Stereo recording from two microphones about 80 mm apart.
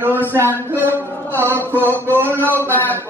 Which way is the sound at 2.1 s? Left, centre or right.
Right.